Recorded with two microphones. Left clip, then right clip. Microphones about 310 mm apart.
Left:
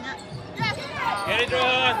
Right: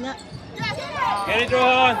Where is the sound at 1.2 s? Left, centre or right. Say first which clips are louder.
Right 4 dB; centre.